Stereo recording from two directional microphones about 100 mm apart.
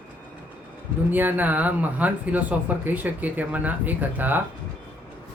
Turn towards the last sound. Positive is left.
turn(degrees=-20)  # may be behind; listen again after turning